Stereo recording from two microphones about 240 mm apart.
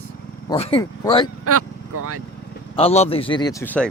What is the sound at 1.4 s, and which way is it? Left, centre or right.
Vehicle, right.